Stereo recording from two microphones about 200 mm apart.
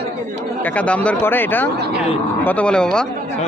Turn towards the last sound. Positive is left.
turn(degrees=5)  # may be behind; listen again after turning